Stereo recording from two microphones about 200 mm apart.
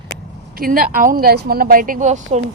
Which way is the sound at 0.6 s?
45° right (ahead or behind).